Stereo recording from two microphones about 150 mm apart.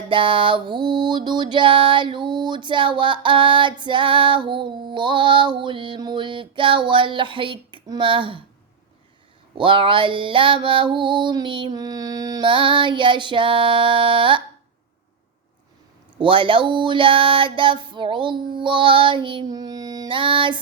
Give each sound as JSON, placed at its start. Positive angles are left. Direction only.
{"t": 0.1, "sound": "music", "side_deg": -35}
{"t": 9.6, "sound": "music", "side_deg": -35}
{"t": 16.1, "sound": "music", "side_deg": -35}